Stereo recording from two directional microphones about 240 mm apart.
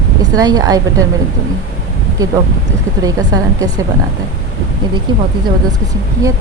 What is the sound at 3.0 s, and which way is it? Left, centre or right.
Speech, centre.